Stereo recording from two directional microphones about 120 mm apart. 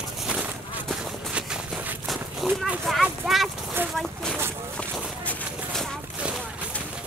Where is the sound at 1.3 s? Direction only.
5° right (ahead or behind).